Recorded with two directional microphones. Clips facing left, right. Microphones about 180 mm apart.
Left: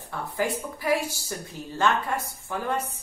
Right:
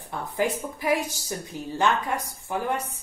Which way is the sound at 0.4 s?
20° right (ahead or behind).